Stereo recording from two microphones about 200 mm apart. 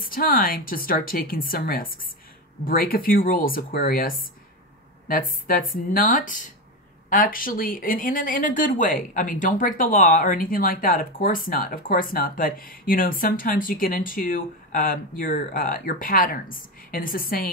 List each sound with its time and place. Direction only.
0.0 s speech: 45° left (ahead or behind)